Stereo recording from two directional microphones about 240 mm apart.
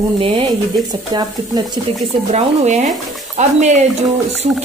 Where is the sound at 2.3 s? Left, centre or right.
Right.